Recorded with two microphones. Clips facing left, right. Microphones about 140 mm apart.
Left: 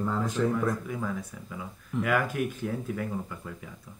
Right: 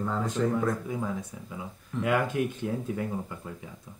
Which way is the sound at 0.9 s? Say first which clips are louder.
Right 1 dB; 25° right (ahead or behind).